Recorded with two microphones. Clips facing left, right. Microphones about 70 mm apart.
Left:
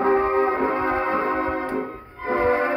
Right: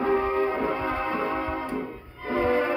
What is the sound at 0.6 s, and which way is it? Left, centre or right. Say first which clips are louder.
Organ: left 5 dB; left.